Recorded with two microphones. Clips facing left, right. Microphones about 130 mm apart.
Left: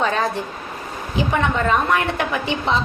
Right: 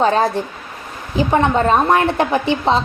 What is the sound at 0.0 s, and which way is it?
Speech, 35° right (ahead or behind).